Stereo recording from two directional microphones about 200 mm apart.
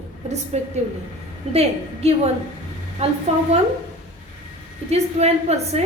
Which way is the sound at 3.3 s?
35° right (ahead or behind).